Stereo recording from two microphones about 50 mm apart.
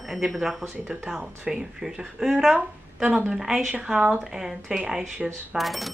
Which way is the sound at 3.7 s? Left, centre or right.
Centre.